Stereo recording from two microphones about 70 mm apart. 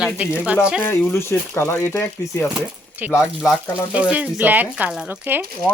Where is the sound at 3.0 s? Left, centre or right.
Right.